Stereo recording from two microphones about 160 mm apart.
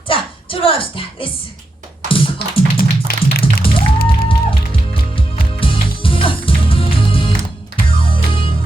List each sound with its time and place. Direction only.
0.1 s music: 35° left (ahead or behind)
2.0 s tap: 35° left (ahead or behind)
2.7 s music: 70° left (ahead or behind)
3.4 s music: 35° left (ahead or behind)